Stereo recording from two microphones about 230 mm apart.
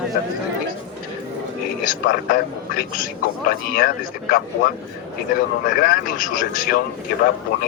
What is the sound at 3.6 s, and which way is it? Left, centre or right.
Speech, left.